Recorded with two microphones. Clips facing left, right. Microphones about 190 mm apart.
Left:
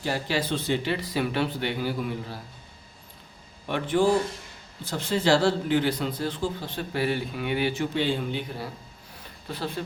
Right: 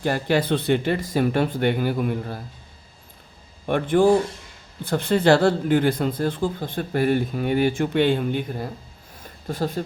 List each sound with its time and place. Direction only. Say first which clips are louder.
0.0 s speech: right 6 dB; 55° right (ahead or behind)
3.7 s a man's voice: right 5 dB; 50° right (ahead or behind)